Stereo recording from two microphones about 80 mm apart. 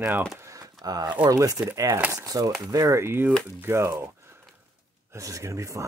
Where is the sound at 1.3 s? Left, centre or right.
Right.